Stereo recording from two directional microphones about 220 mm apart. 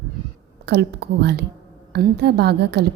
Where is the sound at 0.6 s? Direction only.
50° right (ahead or behind).